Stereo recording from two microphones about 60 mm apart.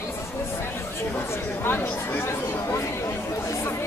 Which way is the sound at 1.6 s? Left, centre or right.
Left.